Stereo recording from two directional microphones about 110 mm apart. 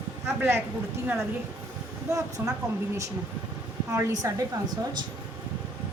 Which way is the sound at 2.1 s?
30° right (ahead or behind).